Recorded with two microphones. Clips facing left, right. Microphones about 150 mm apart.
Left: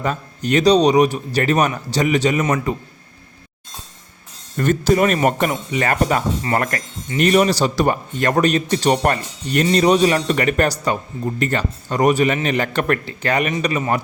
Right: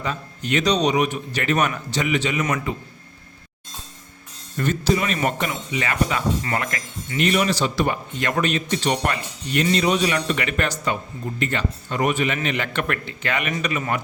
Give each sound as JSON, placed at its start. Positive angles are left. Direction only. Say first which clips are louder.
{"t": 0.0, "sound": "a man's voice", "louder": "left 5 dB", "side_deg": 45}
{"t": 4.5, "sound": "a man's voice", "louder": "left 5 dB", "side_deg": 50}